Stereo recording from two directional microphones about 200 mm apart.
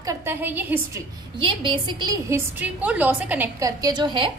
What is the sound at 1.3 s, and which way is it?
A woman's voice, 25° right (ahead or behind).